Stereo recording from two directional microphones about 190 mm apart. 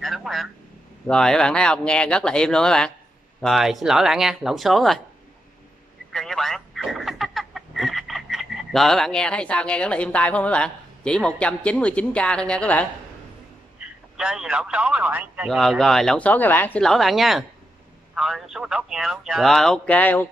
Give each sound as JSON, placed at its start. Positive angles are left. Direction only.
{"t": 0.0, "sound": "speech", "side_deg": 0}
{"t": 6.1, "sound": "speech", "side_deg": 0}
{"t": 13.7, "sound": "speech", "side_deg": -5}